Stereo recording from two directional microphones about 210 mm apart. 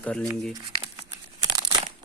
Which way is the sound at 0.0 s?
5° left (ahead or behind).